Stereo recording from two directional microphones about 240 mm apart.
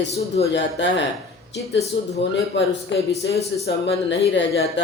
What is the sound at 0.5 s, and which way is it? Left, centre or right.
Speech, left.